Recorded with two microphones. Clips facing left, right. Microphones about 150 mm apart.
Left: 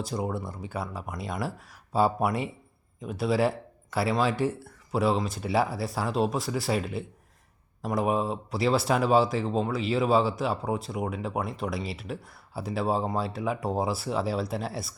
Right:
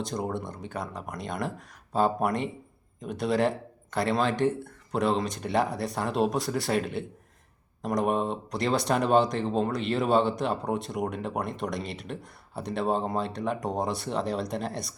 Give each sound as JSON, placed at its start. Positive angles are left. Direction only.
{"t": 0.0, "sound": "speech", "side_deg": 5}